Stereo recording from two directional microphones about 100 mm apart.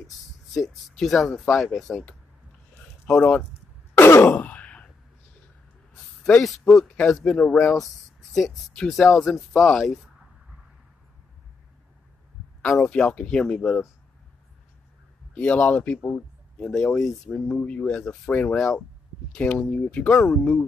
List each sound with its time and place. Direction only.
0.5 s speech: 5° left (ahead or behind)
3.1 s speech: 15° left (ahead or behind)
3.9 s throat clearing: 30° left (ahead or behind)
4.3 s sigh: 15° left (ahead or behind)
6.2 s speech: 10° left (ahead or behind)
12.6 s speech: 10° left (ahead or behind)
15.3 s speech: 10° left (ahead or behind)